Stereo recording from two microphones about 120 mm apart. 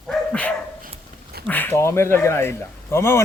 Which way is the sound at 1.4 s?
15° left (ahead or behind).